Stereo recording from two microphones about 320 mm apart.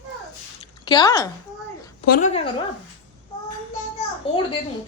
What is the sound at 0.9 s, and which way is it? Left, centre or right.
Speech, centre.